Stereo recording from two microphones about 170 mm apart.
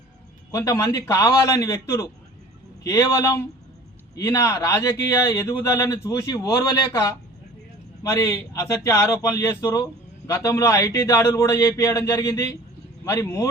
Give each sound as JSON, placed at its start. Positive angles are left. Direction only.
{"t": 0.5, "sound": "speech", "side_deg": 20}